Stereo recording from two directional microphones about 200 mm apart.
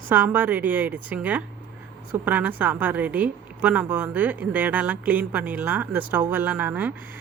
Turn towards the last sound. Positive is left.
turn(degrees=-10)  # may be behind; listen again after turning